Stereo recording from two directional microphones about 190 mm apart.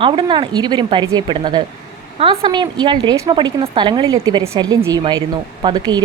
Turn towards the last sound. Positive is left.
turn(degrees=-20)  # may be behind; listen again after turning